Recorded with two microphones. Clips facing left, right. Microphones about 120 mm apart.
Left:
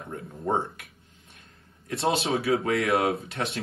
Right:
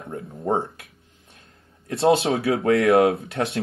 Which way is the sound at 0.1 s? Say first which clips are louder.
Right 4 dB; 30° right (ahead or behind).